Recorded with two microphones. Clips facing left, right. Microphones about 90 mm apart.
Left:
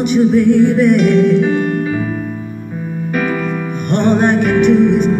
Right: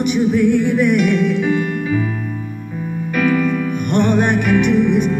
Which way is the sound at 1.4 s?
45° left (ahead or behind).